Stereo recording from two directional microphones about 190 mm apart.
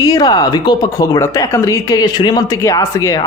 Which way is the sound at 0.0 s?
20° left (ahead or behind).